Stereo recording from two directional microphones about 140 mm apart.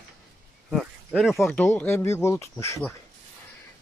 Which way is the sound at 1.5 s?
15° left (ahead or behind).